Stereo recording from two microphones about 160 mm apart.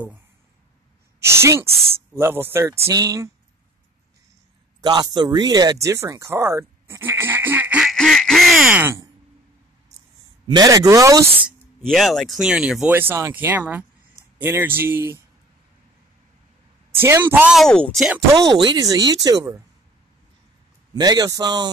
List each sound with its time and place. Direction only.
1.2 s speech: 15° right (ahead or behind)
4.8 s speech: 25° right (ahead or behind); by 7.9 s 10° right (ahead or behind)
7.9 s quack: 5° left (ahead or behind); by 9.1 s 15° right (ahead or behind)
10.4 s speech: 25° right (ahead or behind)
11.8 s speech: centre (ahead or behind); by 15.2 s 15° right (ahead or behind)
16.9 s speech: 15° right (ahead or behind)
17.6 s speech: 5° left (ahead or behind)
18.3 s speech: 25° right (ahead or behind)
20.9 s speech: 25° right (ahead or behind)